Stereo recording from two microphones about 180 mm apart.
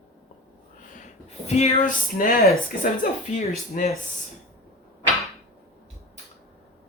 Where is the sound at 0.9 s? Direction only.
40° left (ahead or behind).